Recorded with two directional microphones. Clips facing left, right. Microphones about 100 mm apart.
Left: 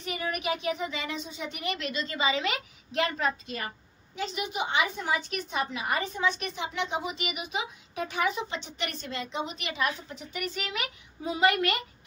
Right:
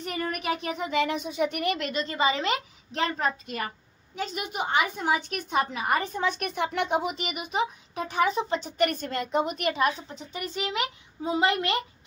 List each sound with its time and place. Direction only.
0.0 s a woman's voice: 45° right (ahead or behind)
4.1 s a woman's voice: 45° right (ahead or behind); by 11.8 s 25° right (ahead or behind)